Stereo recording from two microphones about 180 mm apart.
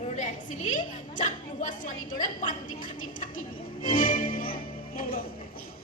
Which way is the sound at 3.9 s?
50° left (ahead or behind).